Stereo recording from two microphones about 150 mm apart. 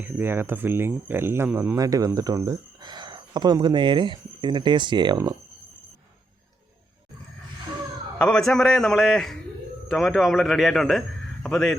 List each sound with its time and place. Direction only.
0.0 s speech: 15° right (ahead or behind)
8.2 s a man's voice: 5° left (ahead or behind)